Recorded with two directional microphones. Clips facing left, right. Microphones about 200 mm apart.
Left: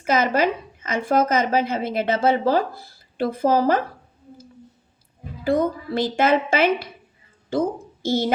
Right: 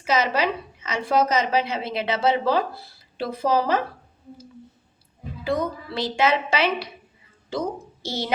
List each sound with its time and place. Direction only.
0.0 s a woman's voice: 50° left (ahead or behind)
5.5 s a woman's voice: 50° left (ahead or behind)
8.0 s speech: 50° left (ahead or behind)